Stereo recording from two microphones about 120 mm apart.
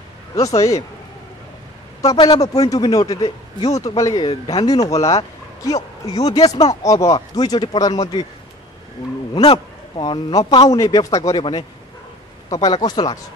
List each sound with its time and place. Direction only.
0.4 s a man's voice: 30° left (ahead or behind)
2.1 s a man's voice: 40° left (ahead or behind)
9.3 s a man's voice: 40° left (ahead or behind)